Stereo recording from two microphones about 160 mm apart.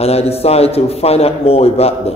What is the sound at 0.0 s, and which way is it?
A man's voice, 40° left (ahead or behind).